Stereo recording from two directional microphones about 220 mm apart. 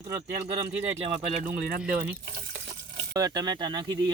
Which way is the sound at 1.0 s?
30° right (ahead or behind).